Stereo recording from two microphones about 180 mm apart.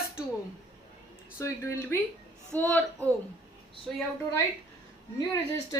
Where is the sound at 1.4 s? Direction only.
15° left (ahead or behind).